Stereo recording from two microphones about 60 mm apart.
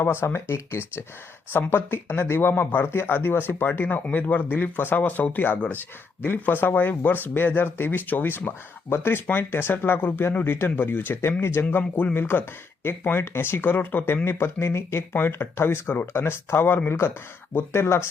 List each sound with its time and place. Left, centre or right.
0.0 s speech: left
11.7 s speech: left
12.1 s speech: left